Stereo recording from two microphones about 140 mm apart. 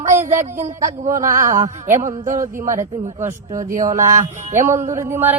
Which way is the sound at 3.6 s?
70° right (ahead or behind).